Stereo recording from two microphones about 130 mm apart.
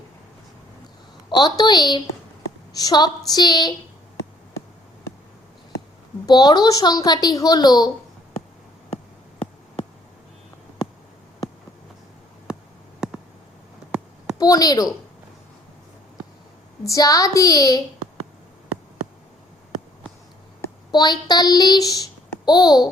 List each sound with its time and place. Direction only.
1.3 s a woman's voice: 35° left (ahead or behind)
6.2 s a woman's voice: 30° left (ahead or behind)
14.3 s a woman's voice: 30° left (ahead or behind)
16.8 s a woman's voice: 25° left (ahead or behind)
20.9 s a woman's voice: 35° left (ahead or behind)